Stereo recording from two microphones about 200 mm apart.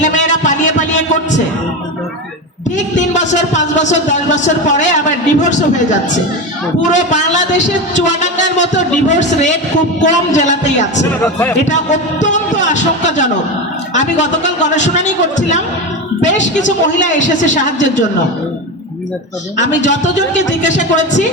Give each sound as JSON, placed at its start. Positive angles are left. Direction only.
{"t": 0.0, "sound": "a sound", "side_deg": 40}
{"t": 2.7, "sound": "a man's voice", "side_deg": 35}
{"t": 6.8, "sound": "a man's voice", "side_deg": 40}
{"t": 11.2, "sound": "speech", "side_deg": 10}
{"t": 11.7, "sound": "a man's voice", "side_deg": 35}
{"t": 19.5, "sound": "a man's voice", "side_deg": 35}